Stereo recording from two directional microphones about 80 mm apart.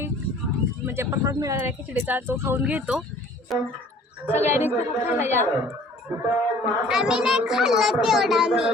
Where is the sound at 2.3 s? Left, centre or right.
Right.